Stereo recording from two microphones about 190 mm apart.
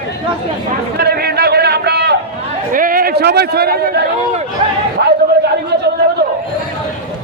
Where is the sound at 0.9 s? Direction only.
55° right (ahead or behind).